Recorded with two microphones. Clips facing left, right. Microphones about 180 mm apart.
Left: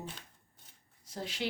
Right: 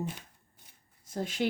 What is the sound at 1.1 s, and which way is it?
Speech, 50° right (ahead or behind).